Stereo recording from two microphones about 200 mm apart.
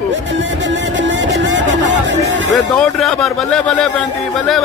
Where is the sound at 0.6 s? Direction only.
65° right (ahead or behind).